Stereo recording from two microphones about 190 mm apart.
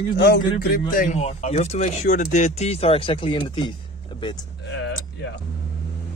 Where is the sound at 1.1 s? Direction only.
35° left (ahead or behind).